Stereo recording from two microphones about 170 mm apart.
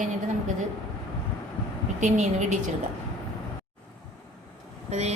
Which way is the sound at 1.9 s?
45° right (ahead or behind).